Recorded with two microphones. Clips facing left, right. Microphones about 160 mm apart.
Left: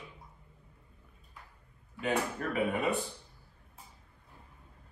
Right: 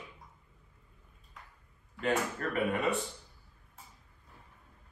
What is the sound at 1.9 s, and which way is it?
Speech, 5° left (ahead or behind).